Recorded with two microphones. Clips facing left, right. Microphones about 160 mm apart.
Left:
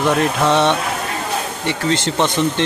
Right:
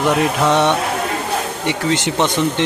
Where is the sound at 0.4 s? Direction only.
15° right (ahead or behind).